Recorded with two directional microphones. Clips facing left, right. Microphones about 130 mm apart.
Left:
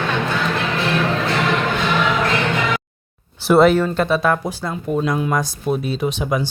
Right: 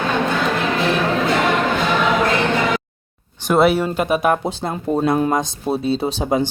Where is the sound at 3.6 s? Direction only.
10° right (ahead or behind); by 6.4 s 30° right (ahead or behind).